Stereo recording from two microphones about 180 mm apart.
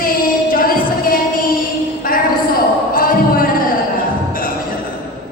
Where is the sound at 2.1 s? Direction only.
50° left (ahead or behind).